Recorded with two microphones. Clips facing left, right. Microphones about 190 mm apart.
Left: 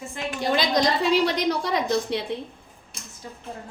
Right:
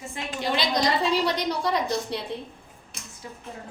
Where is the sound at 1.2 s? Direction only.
90° left.